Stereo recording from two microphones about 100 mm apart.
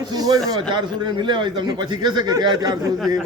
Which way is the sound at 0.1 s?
40° right (ahead or behind).